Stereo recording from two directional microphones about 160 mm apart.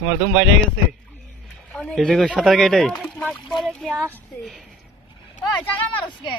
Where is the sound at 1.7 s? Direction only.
5° left (ahead or behind).